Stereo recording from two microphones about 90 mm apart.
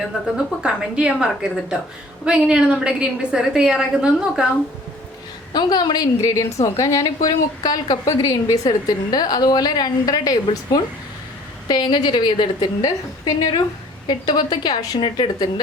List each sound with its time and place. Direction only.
0.3 s a woman's voice: 10° right (ahead or behind)
5.5 s a woman's voice: 50° left (ahead or behind)
11.7 s a woman's voice: 55° left (ahead or behind)